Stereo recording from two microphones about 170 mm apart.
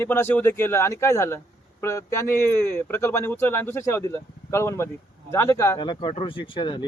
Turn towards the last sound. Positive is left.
turn(degrees=25)  # may be behind; listen again after turning